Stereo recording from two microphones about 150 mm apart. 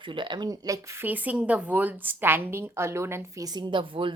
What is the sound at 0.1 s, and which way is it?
Speech, 30° right (ahead or behind).